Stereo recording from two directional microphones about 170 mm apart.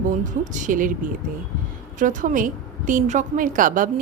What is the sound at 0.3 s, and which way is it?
A woman's voice, 45° right (ahead or behind).